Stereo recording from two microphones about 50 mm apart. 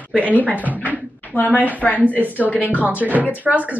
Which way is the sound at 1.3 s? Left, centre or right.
Left.